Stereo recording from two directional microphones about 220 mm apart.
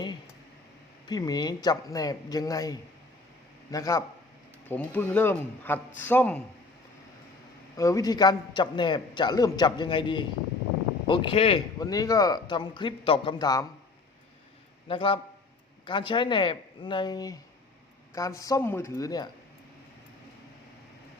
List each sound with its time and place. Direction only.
1.0 s speech: 15° left (ahead or behind)
7.8 s a man's voice: 15° left (ahead or behind)
14.8 s a man's voice: 25° left (ahead or behind)